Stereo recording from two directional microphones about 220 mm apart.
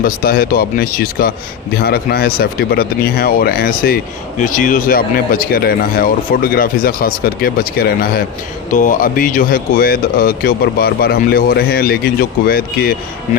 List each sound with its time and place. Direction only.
0.0 s speech: 45° left (ahead or behind)